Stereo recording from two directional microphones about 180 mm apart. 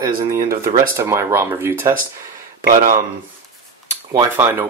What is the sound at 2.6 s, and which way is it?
Speech, 50° right (ahead or behind).